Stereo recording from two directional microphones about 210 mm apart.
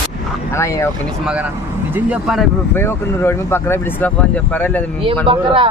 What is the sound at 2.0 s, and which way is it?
Speech, 5° right (ahead or behind).